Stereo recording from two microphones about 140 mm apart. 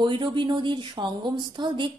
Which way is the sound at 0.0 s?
35° right (ahead or behind).